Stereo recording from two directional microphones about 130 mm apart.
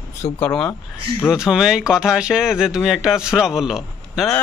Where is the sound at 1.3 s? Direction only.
5° right (ahead or behind).